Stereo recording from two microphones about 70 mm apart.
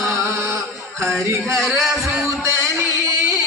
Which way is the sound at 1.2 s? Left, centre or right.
Right.